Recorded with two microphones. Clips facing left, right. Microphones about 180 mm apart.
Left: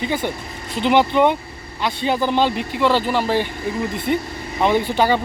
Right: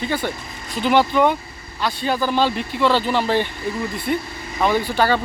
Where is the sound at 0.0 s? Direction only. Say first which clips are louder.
Left 1 dB; 15° left (ahead or behind).